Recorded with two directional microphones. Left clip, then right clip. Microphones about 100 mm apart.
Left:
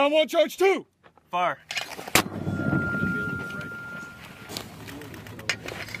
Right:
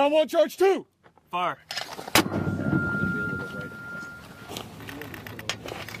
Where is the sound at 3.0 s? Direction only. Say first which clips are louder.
Even; 5° left (ahead or behind).